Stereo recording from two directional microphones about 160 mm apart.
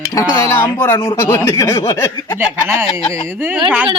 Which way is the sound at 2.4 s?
15° right (ahead or behind).